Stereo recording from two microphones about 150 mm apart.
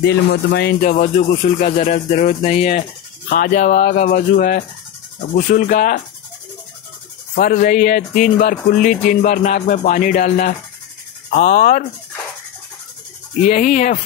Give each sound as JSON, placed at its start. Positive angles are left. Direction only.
{"t": 0.0, "sound": "speech", "side_deg": 90}
{"t": 3.3, "sound": "speech", "side_deg": 70}
{"t": 7.3, "sound": "speech", "side_deg": 65}
{"t": 11.2, "sound": "speech", "side_deg": 75}
{"t": 13.4, "sound": "speech", "side_deg": 60}